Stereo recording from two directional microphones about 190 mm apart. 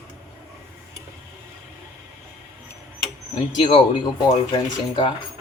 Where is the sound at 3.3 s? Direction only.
25° left (ahead or behind).